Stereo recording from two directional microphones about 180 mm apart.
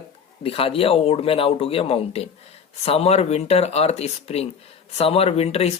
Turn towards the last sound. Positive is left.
turn(degrees=35)  # may be behind; listen again after turning